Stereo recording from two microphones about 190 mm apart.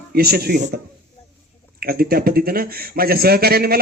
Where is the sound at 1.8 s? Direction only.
55° right (ahead or behind).